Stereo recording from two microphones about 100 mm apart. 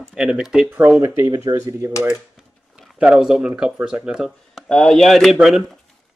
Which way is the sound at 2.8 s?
5° right (ahead or behind).